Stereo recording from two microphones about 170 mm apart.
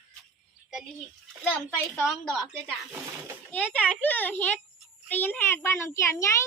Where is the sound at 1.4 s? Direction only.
5° left (ahead or behind).